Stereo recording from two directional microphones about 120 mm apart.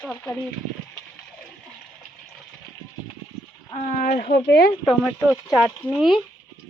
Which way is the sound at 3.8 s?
75° left (ahead or behind).